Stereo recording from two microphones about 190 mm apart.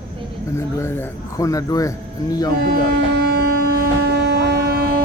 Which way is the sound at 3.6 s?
55° right (ahead or behind).